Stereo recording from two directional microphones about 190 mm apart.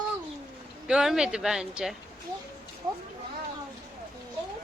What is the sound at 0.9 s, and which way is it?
Speech, 5° right (ahead or behind).